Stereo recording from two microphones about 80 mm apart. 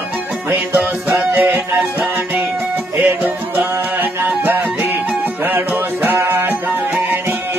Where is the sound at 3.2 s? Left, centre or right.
Centre.